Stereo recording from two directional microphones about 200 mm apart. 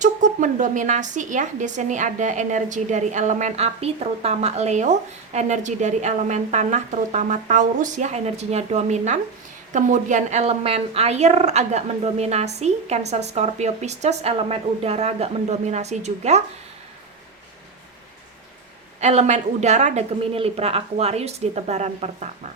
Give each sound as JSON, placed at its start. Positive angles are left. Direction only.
{"t": 0.0, "sound": "a woman's voice", "side_deg": -40}
{"t": 18.9, "sound": "a woman's voice", "side_deg": -35}